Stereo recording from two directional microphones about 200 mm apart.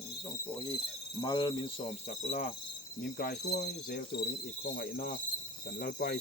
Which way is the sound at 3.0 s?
45° left (ahead or behind).